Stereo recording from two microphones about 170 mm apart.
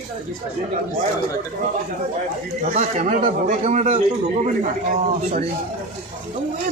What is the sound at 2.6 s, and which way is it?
A man's voice, 45° right (ahead or behind).